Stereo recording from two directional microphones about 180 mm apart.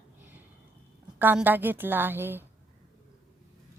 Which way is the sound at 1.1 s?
10° right (ahead or behind).